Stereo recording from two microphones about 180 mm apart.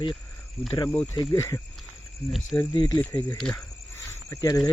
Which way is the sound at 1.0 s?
25° left (ahead or behind).